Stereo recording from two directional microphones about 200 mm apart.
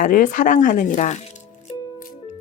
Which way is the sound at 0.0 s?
40° left (ahead or behind).